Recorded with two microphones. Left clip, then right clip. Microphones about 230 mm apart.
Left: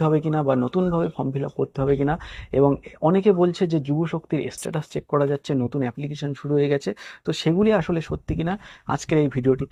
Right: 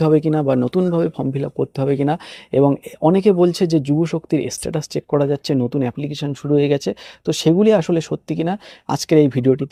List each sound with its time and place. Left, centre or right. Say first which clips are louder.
0.0 s speech: right 5 dB; right